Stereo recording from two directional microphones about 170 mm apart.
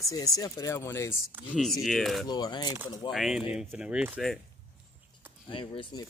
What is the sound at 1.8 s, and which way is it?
Speech, centre (ahead or behind).